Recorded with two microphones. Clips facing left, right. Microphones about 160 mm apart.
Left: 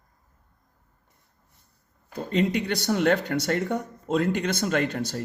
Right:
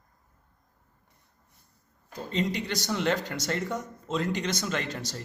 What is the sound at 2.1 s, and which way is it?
Speech, 60° left (ahead or behind).